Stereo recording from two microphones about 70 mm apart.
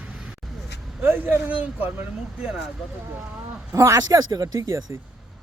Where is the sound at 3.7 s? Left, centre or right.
Right.